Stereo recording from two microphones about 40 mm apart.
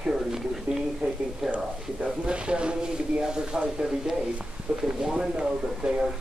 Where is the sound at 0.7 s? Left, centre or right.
Right.